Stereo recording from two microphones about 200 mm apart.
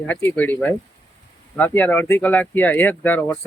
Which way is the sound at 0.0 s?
10° left (ahead or behind).